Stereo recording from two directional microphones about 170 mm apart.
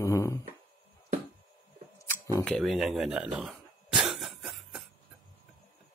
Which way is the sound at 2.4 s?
5° left (ahead or behind).